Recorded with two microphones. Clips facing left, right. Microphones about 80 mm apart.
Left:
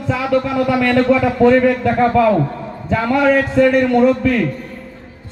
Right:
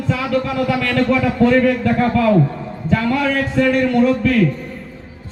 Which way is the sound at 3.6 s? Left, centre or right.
Centre.